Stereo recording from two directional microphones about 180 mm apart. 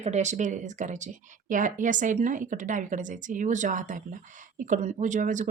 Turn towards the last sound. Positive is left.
turn(degrees=-45)  # may be behind; listen again after turning